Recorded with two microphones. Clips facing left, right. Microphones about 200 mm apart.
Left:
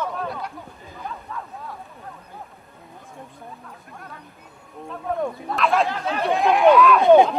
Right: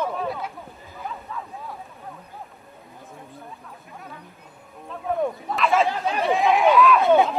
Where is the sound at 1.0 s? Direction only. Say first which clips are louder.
Even; centre (ahead or behind).